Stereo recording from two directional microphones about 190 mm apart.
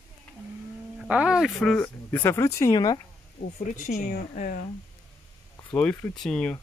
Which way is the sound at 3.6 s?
40° left (ahead or behind).